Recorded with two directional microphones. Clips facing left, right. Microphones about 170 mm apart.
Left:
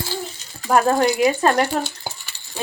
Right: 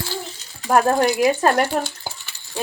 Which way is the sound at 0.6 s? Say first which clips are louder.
Even; 5° right (ahead or behind).